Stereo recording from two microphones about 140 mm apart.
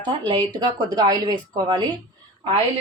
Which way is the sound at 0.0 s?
35° right (ahead or behind).